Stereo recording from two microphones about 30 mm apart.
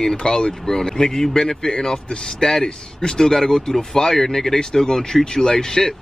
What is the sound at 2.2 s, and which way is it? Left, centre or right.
Speech, centre.